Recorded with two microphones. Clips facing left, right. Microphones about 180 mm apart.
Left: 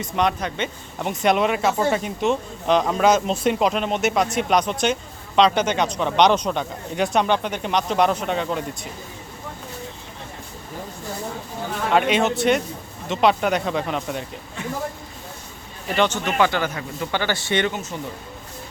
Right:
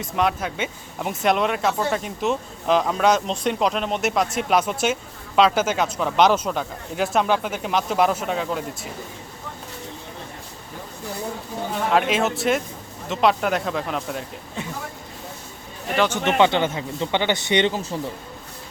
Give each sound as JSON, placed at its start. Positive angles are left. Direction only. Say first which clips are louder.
{"t": 0.0, "sound": "speech", "louder": "left 1 dB", "side_deg": -5}
{"t": 11.9, "sound": "speech", "louder": "left 2 dB", "side_deg": 0}
{"t": 16.2, "sound": "speech", "louder": "right 3 dB", "side_deg": -25}
{"t": 17.7, "sound": "speech", "louder": "right 3 dB", "side_deg": -30}